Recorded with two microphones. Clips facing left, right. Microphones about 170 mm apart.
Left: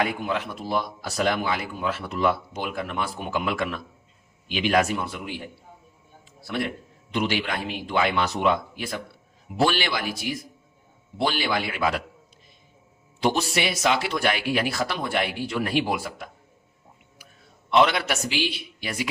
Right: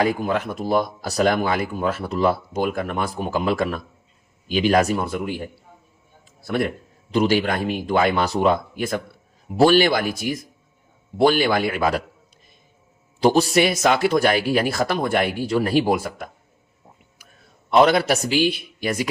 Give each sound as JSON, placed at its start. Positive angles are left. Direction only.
{"t": 0.0, "sound": "speech", "side_deg": -40}
{"t": 13.1, "sound": "speech", "side_deg": -35}
{"t": 17.7, "sound": "speech", "side_deg": -40}